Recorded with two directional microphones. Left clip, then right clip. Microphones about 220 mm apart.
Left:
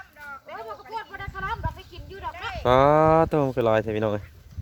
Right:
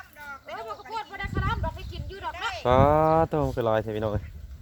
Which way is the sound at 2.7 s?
15° left (ahead or behind).